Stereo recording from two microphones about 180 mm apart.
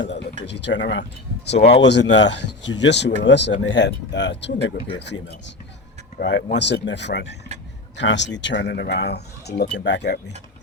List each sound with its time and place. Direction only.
0.4 s speech: 80° left
1.5 s speech: 35° left (ahead or behind)
1.8 s speech: 80° left
8.0 s speech: 80° left
9.7 s speech: 80° left